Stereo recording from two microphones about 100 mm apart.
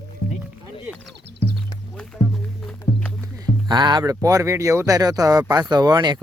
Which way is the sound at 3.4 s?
45° right (ahead or behind).